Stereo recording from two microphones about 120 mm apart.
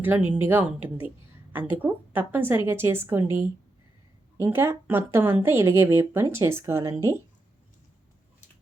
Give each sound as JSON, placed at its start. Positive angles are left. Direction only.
{"t": 0.0, "sound": "a woman's voice", "side_deg": -15}